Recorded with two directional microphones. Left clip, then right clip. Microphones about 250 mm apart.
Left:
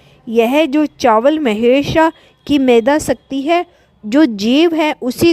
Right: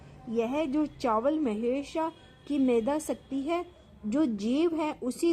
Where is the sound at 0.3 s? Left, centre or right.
Left.